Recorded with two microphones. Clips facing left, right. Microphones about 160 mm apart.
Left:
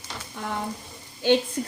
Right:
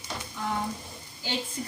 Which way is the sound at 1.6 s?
60° left (ahead or behind).